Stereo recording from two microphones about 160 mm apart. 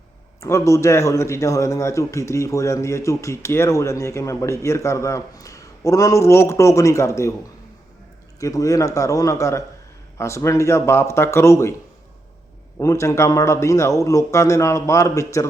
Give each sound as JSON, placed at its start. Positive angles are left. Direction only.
{"t": 0.3, "sound": "a man's voice", "side_deg": 20}
{"t": 8.4, "sound": "a man's voice", "side_deg": 20}
{"t": 12.8, "sound": "a man's voice", "side_deg": 20}